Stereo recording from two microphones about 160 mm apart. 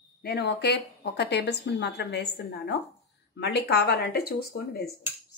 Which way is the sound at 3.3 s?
90° left.